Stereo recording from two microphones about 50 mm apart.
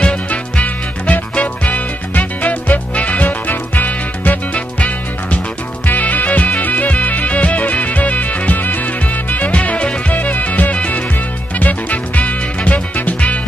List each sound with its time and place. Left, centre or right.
0.0 s music: left